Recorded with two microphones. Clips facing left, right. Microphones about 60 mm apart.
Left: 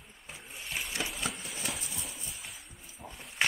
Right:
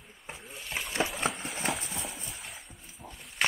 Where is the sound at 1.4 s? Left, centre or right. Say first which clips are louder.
Right 6 dB; right.